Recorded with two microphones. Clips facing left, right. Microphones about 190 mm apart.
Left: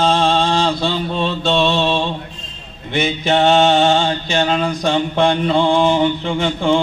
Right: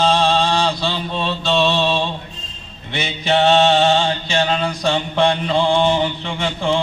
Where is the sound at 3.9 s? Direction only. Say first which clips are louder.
Left 1 dB; 35° left (ahead or behind).